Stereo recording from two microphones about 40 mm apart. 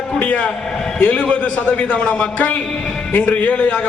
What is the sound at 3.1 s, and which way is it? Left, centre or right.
Speech, left.